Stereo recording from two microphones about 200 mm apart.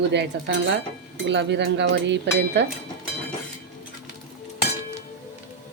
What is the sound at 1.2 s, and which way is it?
Speech, 60° right (ahead or behind).